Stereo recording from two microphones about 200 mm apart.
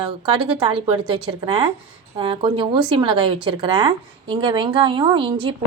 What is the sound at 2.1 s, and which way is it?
A woman's voice, 25° right (ahead or behind).